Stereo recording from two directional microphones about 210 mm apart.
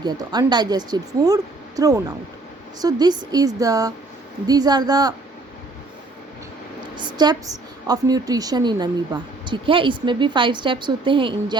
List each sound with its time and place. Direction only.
0.0 s a woman's voice: 20° right (ahead or behind)
6.9 s a woman's voice: 20° right (ahead or behind)